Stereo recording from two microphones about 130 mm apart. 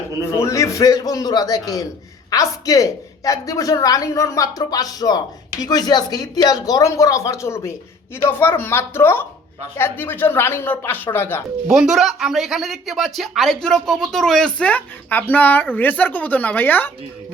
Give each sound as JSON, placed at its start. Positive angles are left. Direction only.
{"t": 0.3, "sound": "a woman's voice", "side_deg": 20}
{"t": 11.7, "sound": "speech", "side_deg": -5}